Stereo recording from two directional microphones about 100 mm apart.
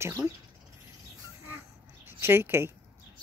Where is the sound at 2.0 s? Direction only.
25° right (ahead or behind).